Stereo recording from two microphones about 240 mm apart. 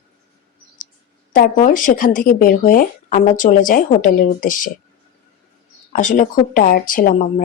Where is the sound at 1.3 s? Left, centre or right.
Left.